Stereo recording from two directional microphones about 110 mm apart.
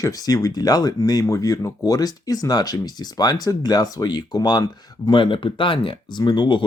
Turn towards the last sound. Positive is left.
turn(degrees=40)  # may be behind; listen again after turning